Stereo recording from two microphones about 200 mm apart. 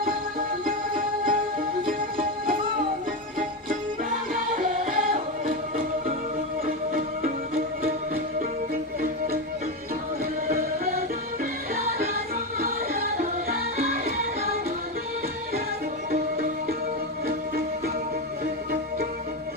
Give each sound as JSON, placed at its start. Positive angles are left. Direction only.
{"t": 0.0, "sound": "music", "side_deg": -45}
{"t": 4.5, "sound": "music", "side_deg": -40}
{"t": 9.0, "sound": "music", "side_deg": -45}
{"t": 10.5, "sound": "music", "side_deg": -45}
{"t": 12.5, "sound": "music", "side_deg": -45}
{"t": 17.2, "sound": "music", "side_deg": -50}